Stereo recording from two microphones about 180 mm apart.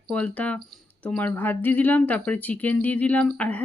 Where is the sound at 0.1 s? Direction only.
5° left (ahead or behind).